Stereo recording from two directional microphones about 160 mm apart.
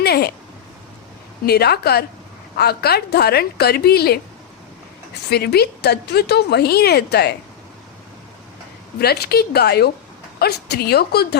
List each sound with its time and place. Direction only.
0.0 s a sound: 85° left
1.5 s a woman's voice: 80° left
5.3 s speech: 90° left
9.0 s a woman's voice: 80° left